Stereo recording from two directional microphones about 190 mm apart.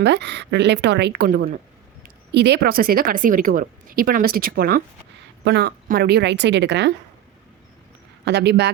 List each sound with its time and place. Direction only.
0.0 s speech: 65° right (ahead or behind)
2.0 s speech: 65° right (ahead or behind)
8.2 s speech: 60° right (ahead or behind)